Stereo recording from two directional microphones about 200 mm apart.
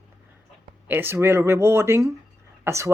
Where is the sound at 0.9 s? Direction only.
10° right (ahead or behind).